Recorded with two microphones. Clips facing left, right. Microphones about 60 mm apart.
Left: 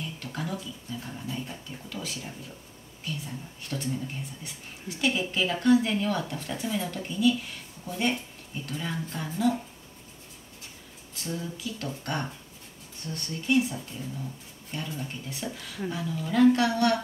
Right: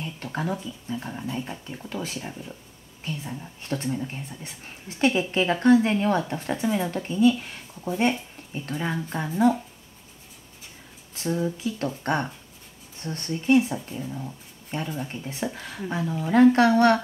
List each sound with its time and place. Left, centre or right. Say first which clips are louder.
0.0 s speech: right 5 dB; right
11.2 s speech: right 8 dB; right
15.0 s speech: right 5 dB; right